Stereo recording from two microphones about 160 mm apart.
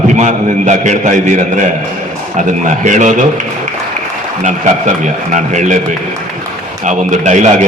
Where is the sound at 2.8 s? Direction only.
50° right (ahead or behind).